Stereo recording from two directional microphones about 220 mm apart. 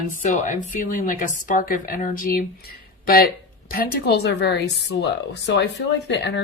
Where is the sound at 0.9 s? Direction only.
40° left (ahead or behind).